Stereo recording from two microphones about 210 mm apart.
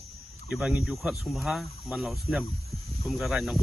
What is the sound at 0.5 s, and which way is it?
Speech, centre (ahead or behind).